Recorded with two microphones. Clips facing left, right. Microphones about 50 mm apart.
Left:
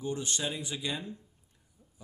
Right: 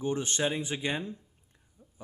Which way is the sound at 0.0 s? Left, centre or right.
Right.